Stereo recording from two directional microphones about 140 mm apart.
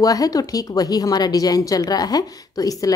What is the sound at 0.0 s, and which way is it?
Speech, 25° left (ahead or behind).